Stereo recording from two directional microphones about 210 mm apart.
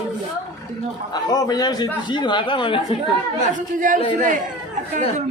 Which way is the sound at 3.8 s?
40° right (ahead or behind).